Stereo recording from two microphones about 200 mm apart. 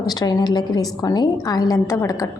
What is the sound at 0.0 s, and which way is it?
A woman's voice, 20° left (ahead or behind).